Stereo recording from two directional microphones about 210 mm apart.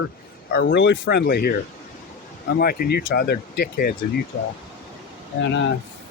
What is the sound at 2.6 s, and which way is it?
Speech, 45° left (ahead or behind).